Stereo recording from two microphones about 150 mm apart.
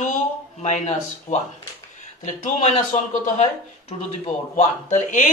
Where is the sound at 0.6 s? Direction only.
50° left (ahead or behind).